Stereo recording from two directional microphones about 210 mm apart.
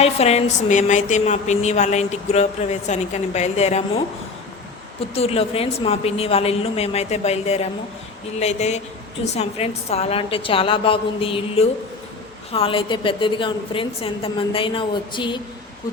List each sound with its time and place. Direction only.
0.0 s a woman's voice: 30° left (ahead or behind)
5.1 s a woman's voice: 30° left (ahead or behind)